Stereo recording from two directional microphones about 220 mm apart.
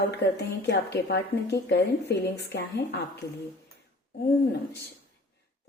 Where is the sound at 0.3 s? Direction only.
50° left (ahead or behind).